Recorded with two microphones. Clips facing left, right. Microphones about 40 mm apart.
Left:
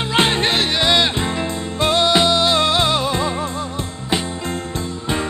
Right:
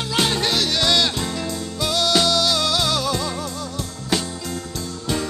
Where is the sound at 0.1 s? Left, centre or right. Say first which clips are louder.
Left 4 dB; left.